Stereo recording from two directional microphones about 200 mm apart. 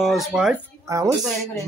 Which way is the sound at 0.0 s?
Centre (ahead or behind).